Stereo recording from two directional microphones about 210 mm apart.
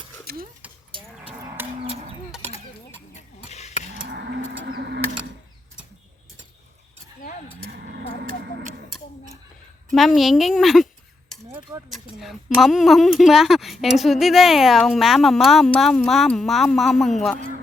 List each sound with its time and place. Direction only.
0.3 s speech: 50° right (ahead or behind)
0.9 s livestock: 25° right (ahead or behind)
1.6 s livestock: 10° right (ahead or behind)
3.2 s a sound: 35° left (ahead or behind)
3.9 s livestock: 55° right (ahead or behind)
7.6 s a sound: 50° right (ahead or behind)
10.2 s a woman's voice: centre (ahead or behind)
11.7 s a sound: 15° right (ahead or behind)
12.1 s a woman's voice: centre (ahead or behind)